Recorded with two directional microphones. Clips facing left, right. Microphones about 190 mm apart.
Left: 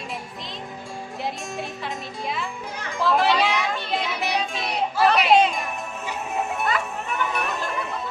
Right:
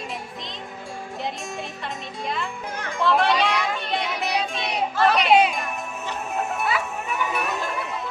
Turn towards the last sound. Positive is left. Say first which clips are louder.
# even
turn(degrees=0)  # may be behind; listen again after turning